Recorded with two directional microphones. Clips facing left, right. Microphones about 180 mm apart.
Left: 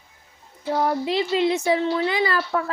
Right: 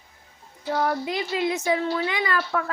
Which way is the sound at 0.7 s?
25° left (ahead or behind).